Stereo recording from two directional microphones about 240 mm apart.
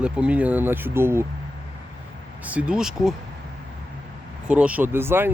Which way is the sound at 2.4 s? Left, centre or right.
Centre.